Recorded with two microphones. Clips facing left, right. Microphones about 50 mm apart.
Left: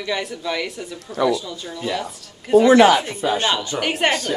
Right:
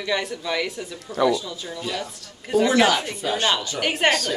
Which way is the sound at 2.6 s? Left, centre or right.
Centre.